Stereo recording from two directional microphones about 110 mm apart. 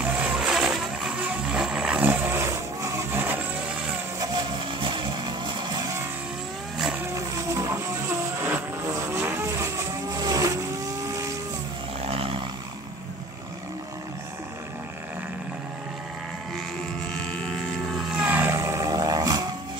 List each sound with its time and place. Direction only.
0.0 s vehicle: 10° right (ahead or behind)
4.8 s music: 40° right (ahead or behind)
7.5 s music: 25° right (ahead or behind)
8.4 s vehicle: 20° right (ahead or behind)
12.0 s a sound: 60° right (ahead or behind)
17.9 s vehicle: 5° right (ahead or behind)
18.3 s vehicle: 20° right (ahead or behind); by 19.5 s 35° right (ahead or behind)